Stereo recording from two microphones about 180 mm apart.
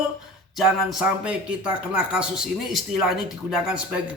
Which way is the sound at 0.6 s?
5° right (ahead or behind).